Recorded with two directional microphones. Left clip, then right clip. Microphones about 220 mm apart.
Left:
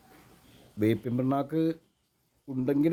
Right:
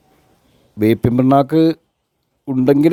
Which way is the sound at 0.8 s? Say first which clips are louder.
Right 13 dB; 40° right (ahead or behind).